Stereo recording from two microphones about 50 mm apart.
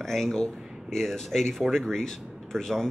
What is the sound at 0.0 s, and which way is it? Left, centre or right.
Speech, centre.